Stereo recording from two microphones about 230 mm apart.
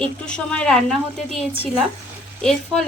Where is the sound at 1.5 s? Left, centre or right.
Right.